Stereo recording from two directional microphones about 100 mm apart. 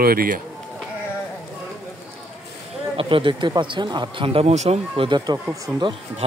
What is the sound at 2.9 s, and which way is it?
Speech, 60° right (ahead or behind).